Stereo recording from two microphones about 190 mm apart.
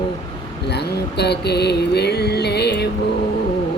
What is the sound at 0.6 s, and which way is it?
Mantra, 60° left (ahead or behind).